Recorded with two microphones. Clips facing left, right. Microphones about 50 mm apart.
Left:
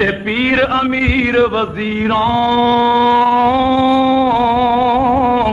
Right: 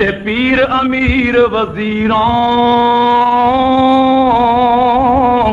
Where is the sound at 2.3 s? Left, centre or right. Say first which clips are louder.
Right 2 dB; right.